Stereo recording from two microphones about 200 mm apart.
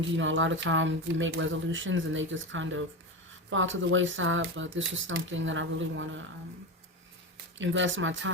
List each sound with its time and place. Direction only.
0.2 s speech: 70° right (ahead or behind)
7.6 s speech: 70° right (ahead or behind)